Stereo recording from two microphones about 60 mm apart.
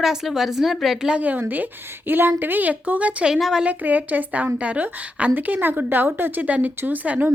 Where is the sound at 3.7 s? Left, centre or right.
Right.